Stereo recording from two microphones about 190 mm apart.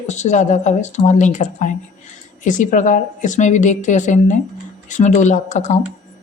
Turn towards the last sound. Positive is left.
turn(degrees=40)  # may be behind; listen again after turning